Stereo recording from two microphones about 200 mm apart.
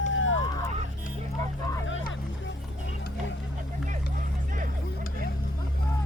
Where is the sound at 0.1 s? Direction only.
75° left (ahead or behind).